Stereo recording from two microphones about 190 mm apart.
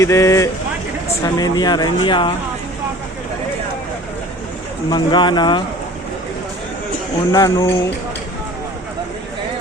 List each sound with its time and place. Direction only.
0.0 s speech: 15° left (ahead or behind)
4.9 s speech: 25° left (ahead or behind)
7.3 s speech: 20° left (ahead or behind)